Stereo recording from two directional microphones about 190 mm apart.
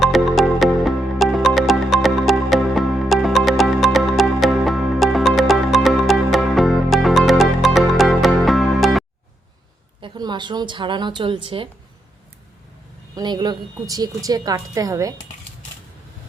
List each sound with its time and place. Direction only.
0.0 s music: centre (ahead or behind)
10.0 s a woman's voice: 25° right (ahead or behind)
13.1 s a woman's voice: 20° right (ahead or behind)